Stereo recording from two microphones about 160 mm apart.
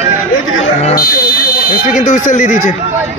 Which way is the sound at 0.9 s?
70° left (ahead or behind).